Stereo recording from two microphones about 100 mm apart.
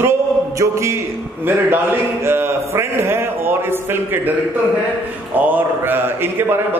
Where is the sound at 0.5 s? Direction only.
30° right (ahead or behind).